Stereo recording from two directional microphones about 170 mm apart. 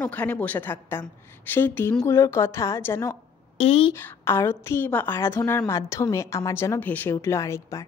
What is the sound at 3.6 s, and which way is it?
Speech, 35° left (ahead or behind).